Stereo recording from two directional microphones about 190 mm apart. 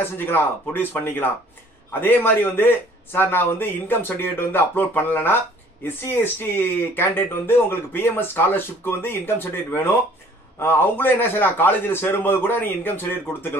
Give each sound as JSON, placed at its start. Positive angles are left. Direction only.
{"t": 0.0, "sound": "speech", "side_deg": 10}